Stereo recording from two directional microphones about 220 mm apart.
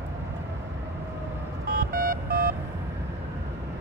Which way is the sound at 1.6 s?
40° right (ahead or behind).